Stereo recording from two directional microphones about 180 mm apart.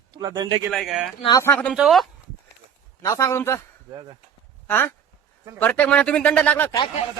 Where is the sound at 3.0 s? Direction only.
20° left (ahead or behind).